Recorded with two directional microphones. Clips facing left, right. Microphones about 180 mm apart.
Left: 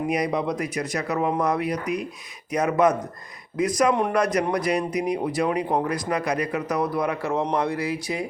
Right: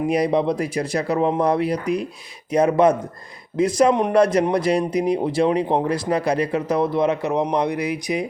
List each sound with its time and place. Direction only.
0.1 s speech: 30° right (ahead or behind)